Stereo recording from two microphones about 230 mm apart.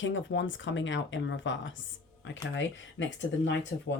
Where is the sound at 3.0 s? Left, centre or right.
Left.